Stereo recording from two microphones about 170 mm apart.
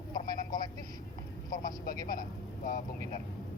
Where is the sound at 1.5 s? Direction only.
50° left (ahead or behind).